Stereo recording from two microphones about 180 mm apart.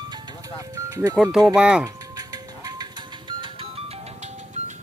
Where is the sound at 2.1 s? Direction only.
20° right (ahead or behind).